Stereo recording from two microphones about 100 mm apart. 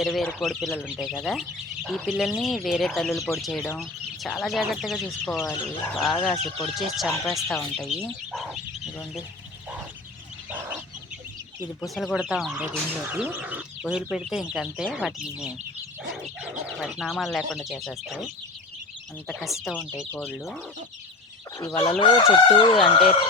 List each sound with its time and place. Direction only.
0.0 s speech: centre (ahead or behind)
10.5 s fowl: 15° right (ahead or behind)
11.8 s speech: centre (ahead or behind)
16.8 s speech: centre (ahead or behind)
19.3 s speech: centre (ahead or behind)
21.6 s chicken: 50° left (ahead or behind)